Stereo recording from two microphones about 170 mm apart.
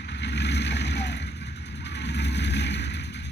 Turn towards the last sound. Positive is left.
turn(degrees=90)